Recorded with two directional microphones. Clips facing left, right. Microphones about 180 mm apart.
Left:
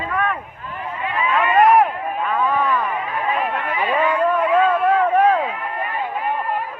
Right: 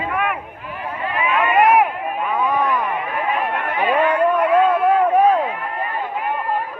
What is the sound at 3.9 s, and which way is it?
Speech, 65° right (ahead or behind).